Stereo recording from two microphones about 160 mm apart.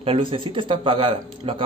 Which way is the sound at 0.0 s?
35° right (ahead or behind).